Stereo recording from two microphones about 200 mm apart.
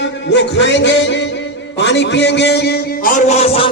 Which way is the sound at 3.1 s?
35° left (ahead or behind).